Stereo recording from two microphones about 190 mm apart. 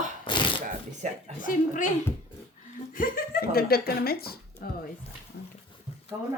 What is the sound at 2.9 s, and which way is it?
Speech, 50° left (ahead or behind).